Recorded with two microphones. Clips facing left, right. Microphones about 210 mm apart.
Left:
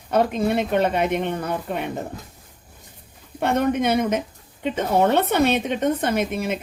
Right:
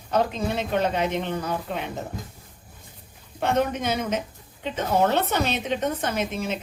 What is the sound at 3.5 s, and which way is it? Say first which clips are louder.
A woman's voice: left 6 dB; 55° left (ahead or behind).